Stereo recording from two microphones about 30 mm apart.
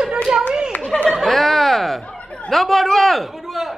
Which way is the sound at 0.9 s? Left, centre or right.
Left.